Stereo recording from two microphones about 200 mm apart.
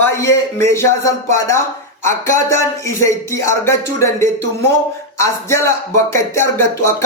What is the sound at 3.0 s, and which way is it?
Speech, 15° left (ahead or behind).